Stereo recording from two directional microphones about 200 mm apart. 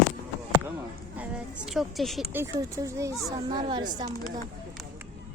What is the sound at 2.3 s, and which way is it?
Speech, 15° right (ahead or behind).